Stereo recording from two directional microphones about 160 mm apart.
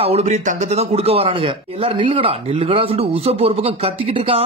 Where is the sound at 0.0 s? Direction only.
40° right (ahead or behind).